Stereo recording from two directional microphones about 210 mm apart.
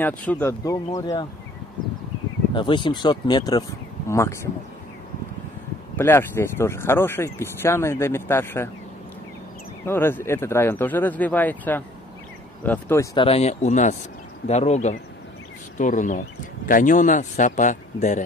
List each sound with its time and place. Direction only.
0.0 s speech: 10° left (ahead or behind)
2.5 s speech: 25° left (ahead or behind)
5.9 s speech: 10° left (ahead or behind)
9.8 s speech: 10° left (ahead or behind); by 18.2 s 35° left (ahead or behind)